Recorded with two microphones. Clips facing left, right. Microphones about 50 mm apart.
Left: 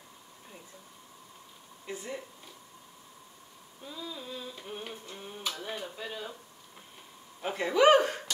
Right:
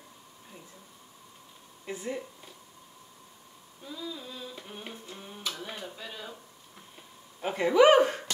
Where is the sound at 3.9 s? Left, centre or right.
Centre.